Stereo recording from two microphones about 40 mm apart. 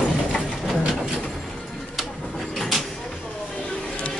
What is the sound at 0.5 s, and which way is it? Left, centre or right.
Bird, centre.